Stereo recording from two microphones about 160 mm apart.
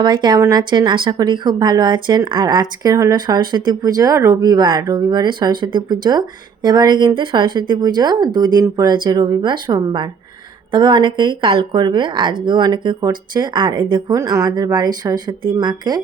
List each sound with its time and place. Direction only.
0.0 s speech: 30° right (ahead or behind)